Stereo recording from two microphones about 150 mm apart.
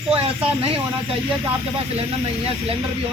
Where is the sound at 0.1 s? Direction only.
40° right (ahead or behind).